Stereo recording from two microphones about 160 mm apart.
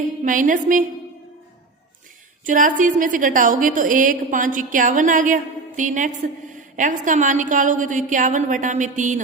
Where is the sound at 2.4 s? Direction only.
55° right (ahead or behind).